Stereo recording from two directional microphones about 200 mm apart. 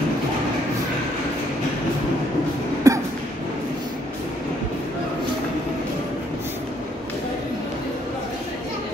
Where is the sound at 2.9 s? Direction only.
15° right (ahead or behind).